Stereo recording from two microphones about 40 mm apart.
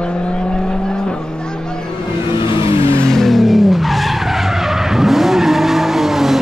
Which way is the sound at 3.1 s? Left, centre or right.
Centre.